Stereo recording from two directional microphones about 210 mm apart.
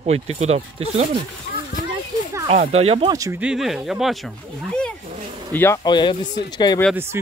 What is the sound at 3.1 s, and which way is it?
Speech, 15° right (ahead or behind).